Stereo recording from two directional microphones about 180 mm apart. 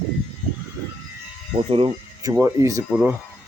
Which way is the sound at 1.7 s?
30° right (ahead or behind).